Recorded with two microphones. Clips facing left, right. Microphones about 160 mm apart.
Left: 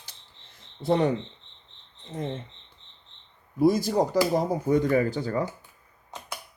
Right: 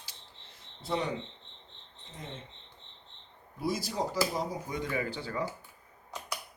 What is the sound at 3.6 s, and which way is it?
Speech, 50° left (ahead or behind).